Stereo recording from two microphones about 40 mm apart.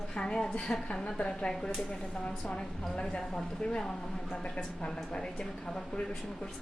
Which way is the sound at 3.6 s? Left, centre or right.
Left.